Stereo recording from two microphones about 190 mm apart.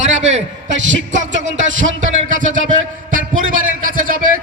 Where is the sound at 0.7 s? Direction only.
75° right (ahead or behind).